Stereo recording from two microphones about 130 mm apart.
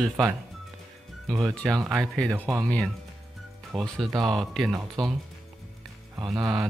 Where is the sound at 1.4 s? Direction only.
5° left (ahead or behind).